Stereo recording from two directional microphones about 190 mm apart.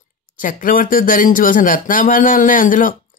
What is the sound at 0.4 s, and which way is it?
Speech, 45° left (ahead or behind).